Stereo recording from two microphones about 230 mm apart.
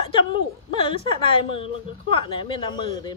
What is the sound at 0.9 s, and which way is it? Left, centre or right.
A woman's voice, left.